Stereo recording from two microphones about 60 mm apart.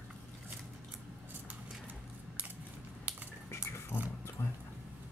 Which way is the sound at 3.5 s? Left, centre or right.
Left.